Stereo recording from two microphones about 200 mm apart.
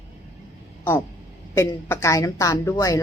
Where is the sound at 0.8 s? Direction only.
10° left (ahead or behind).